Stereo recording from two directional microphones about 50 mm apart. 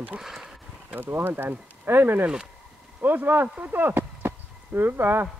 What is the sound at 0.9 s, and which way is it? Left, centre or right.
Speech, right.